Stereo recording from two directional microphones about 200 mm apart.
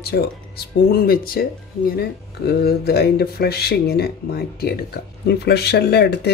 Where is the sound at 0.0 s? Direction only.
50° left (ahead or behind).